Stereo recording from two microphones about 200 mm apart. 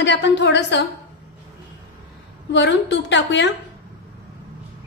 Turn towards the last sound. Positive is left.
turn(degrees=60)  # may be behind; listen again after turning